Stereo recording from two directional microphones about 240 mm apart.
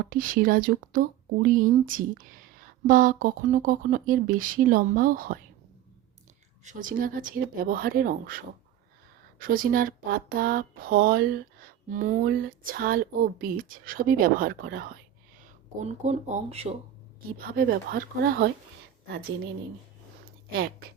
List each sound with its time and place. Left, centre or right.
0.1 s speech: right
6.7 s speech: right
17.5 s speech: right